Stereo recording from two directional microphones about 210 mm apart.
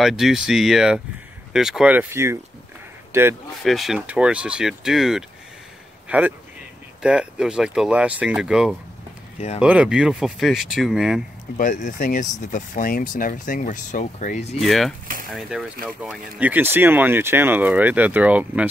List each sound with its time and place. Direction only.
0.0 s speech: centre (ahead or behind)
3.6 s speech: centre (ahead or behind)
11.5 s speech: 40° left (ahead or behind)
14.6 s speech: centre (ahead or behind)